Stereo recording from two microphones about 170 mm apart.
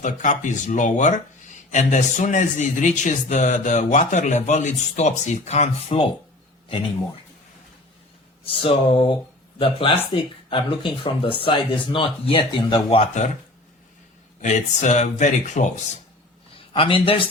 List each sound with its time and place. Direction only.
0.0 s speech: 45° left (ahead or behind)
8.4 s speech: 30° left (ahead or behind)
14.4 s speech: 45° left (ahead or behind)
16.7 s speech: 30° left (ahead or behind)